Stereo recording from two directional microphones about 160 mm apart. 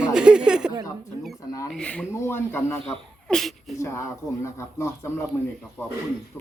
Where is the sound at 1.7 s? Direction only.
5° left (ahead or behind).